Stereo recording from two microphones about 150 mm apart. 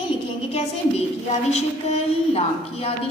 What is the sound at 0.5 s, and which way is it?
A woman's voice, 45° left (ahead or behind).